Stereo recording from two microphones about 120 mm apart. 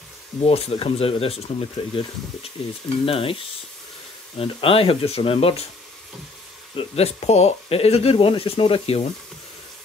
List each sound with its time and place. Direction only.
0.4 s speech: 55° left (ahead or behind)
3.1 s speech: 50° left (ahead or behind)
6.8 s speech: 60° left (ahead or behind)